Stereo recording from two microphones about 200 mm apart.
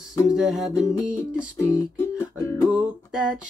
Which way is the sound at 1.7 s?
20° left (ahead or behind).